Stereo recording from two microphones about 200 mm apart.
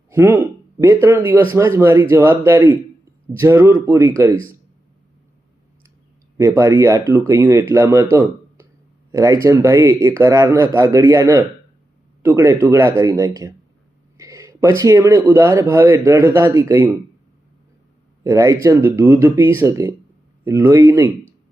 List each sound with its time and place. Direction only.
0.1 s a man's voice: 10° right (ahead or behind)
6.3 s a man's voice: 15° right (ahead or behind)
8.1 s a sound: 15° right (ahead or behind)
9.1 s a man's voice: 15° right (ahead or behind)
18.2 s a man's voice: 15° right (ahead or behind)